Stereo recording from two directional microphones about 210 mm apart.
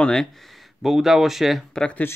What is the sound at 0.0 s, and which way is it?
Speech, centre (ahead or behind).